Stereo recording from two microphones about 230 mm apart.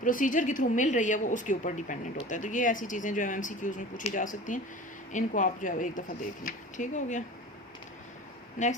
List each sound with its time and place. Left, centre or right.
0.0 s speech: left
8.6 s speech: left